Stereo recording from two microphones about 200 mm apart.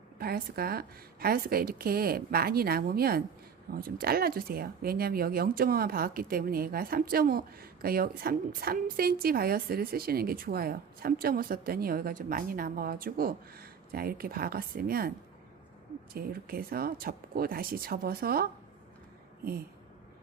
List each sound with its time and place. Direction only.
0.2 s speech: 50° right (ahead or behind)
16.1 s speech: 50° right (ahead or behind)